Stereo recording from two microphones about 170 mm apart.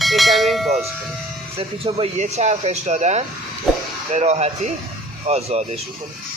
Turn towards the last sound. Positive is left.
turn(degrees=-40)  # may be behind; listen again after turning